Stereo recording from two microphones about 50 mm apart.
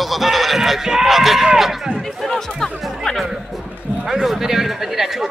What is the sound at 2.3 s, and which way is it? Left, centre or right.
Speech, centre.